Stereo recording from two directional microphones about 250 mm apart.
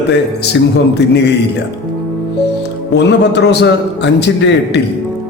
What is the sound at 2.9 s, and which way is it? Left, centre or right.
A man's voice, left.